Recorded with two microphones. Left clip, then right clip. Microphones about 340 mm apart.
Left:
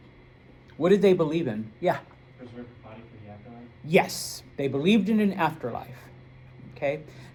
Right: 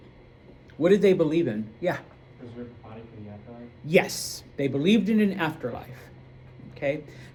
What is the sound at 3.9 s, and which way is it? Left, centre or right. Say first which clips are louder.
Speech: even; centre.